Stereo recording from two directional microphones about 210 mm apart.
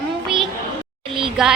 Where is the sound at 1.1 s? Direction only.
25° right (ahead or behind).